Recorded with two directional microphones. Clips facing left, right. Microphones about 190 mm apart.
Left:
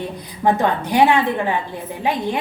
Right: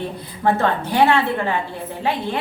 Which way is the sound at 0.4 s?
15° left (ahead or behind).